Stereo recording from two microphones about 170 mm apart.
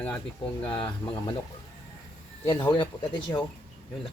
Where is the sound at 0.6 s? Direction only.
30° left (ahead or behind).